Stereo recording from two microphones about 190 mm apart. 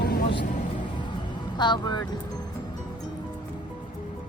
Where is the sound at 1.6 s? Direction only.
25° left (ahead or behind).